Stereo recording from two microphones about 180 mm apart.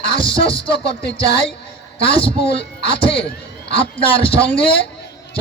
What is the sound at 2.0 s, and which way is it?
Speech, 30° left (ahead or behind).